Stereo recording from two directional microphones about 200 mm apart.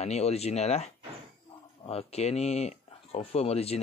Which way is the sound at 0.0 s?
30° left (ahead or behind).